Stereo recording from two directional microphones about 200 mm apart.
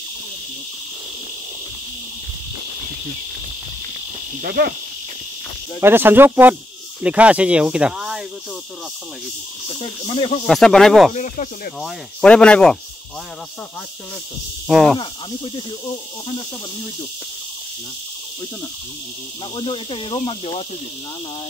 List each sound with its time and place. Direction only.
4.4 s speech: 55° right (ahead or behind)
5.8 s speech: 10° right (ahead or behind)
10.0 s speech: 25° left (ahead or behind)
10.4 s speech: centre (ahead or behind)
11.1 s speech: 40° left (ahead or behind)
11.8 s speech: 5° left (ahead or behind)
14.7 s speech: centre (ahead or behind)
15.0 s speech: 25° left (ahead or behind)
19.5 s speech: 25° left (ahead or behind)